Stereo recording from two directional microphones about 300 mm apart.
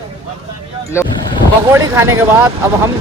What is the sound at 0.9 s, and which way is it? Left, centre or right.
Speech, centre.